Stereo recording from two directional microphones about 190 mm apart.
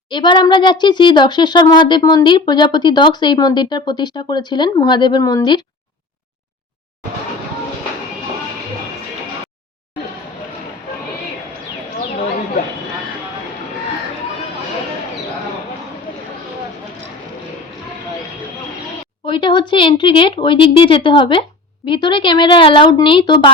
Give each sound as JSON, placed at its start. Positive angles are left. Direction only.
{"t": 0.1, "sound": "speech", "side_deg": 25}
{"t": 19.2, "sound": "speech", "side_deg": 25}